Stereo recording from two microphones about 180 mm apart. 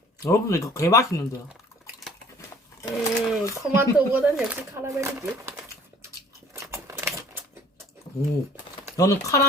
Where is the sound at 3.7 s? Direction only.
10° right (ahead or behind).